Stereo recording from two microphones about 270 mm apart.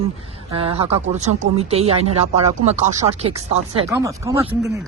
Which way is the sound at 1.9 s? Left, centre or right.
Right.